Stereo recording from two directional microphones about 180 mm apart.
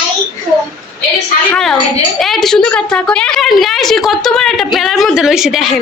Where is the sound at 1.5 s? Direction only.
Centre (ahead or behind).